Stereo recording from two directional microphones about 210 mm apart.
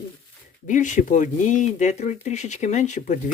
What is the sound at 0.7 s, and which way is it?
Speech, 35° left (ahead or behind).